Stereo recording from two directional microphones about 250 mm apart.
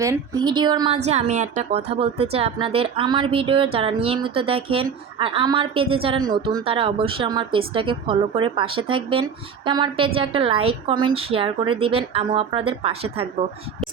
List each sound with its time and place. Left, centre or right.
0.0 s a woman's voice: centre